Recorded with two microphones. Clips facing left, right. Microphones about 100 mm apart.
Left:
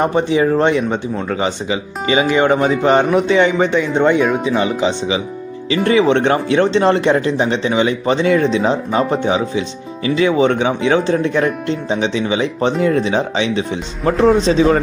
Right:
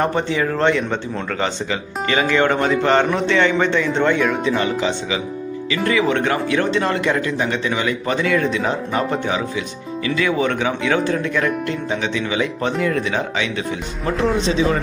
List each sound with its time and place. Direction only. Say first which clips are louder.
0.0 s speech: left 5 dB; 15° left (ahead or behind)
14.3 s speech: left 6 dB; 35° left (ahead or behind)